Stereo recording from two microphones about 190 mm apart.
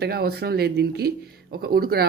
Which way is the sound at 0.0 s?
55° right (ahead or behind).